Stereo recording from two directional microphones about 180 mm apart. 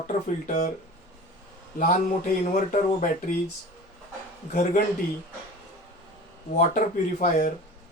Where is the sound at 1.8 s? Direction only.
45° left (ahead or behind).